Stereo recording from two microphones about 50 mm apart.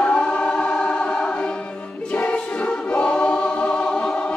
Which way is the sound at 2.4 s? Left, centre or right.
Left.